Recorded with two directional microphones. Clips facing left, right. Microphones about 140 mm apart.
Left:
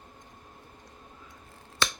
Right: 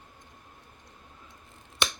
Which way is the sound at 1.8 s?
20° right (ahead or behind).